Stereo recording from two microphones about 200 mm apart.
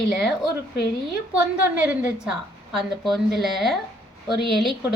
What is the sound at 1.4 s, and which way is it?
Speech, 5° right (ahead or behind).